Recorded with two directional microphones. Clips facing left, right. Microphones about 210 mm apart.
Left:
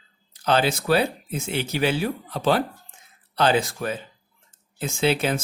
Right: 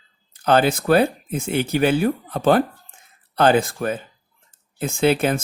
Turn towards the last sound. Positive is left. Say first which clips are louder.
# right 4 dB
turn(degrees=-55)  # may be behind; listen again after turning